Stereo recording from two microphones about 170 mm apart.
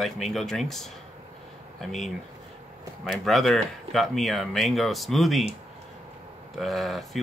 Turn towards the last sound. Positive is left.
turn(degrees=0)  # may be behind; listen again after turning